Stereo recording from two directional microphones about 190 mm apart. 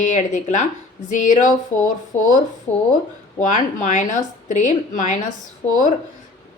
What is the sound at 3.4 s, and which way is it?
A woman's voice, 40° left (ahead or behind).